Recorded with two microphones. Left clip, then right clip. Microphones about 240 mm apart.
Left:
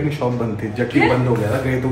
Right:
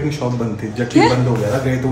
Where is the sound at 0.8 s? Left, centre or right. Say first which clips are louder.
Right 3 dB; centre.